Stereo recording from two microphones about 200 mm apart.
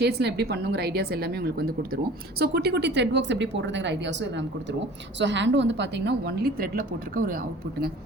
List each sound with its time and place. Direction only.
0.0 s a woman's voice: 55° right (ahead or behind)